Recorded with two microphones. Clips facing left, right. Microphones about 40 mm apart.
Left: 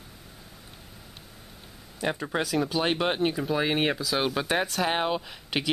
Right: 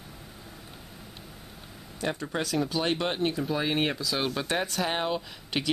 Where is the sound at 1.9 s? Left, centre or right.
Centre.